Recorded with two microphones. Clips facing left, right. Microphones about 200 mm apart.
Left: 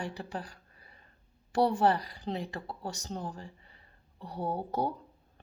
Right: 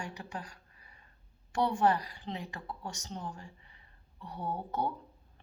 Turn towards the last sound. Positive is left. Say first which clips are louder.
# left 3 dB
turn(degrees=35)  # may be behind; listen again after turning